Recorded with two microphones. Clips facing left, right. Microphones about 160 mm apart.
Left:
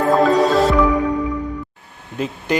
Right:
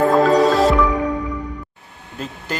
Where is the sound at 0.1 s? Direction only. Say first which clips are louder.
Even; centre (ahead or behind).